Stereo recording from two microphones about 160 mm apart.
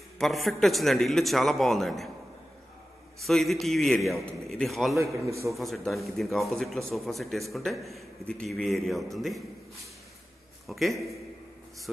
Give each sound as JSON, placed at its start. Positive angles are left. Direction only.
{"t": 0.2, "sound": "a man's voice", "side_deg": 0}
{"t": 3.2, "sound": "a man's voice", "side_deg": 0}
{"t": 4.9, "sound": "a man's voice", "side_deg": -20}
{"t": 5.5, "sound": "a man's voice", "side_deg": 0}
{"t": 10.7, "sound": "a man's voice", "side_deg": 0}